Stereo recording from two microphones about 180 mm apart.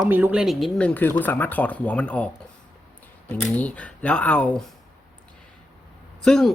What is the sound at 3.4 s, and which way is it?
Speech, 5° left (ahead or behind).